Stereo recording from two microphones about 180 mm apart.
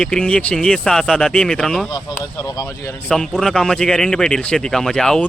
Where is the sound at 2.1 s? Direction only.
20° left (ahead or behind).